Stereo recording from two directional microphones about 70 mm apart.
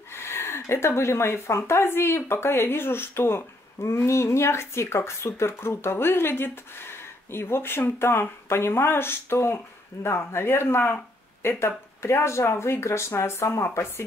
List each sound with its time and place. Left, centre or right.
0.1 s speech: left